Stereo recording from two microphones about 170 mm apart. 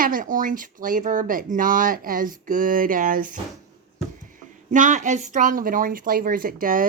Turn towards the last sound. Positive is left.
turn(degrees=-55)  # may be behind; listen again after turning